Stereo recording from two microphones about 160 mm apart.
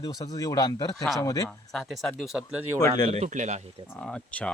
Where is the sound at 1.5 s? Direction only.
Centre (ahead or behind).